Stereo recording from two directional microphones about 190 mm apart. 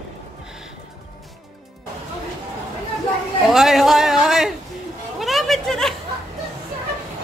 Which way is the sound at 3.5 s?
Centre (ahead or behind).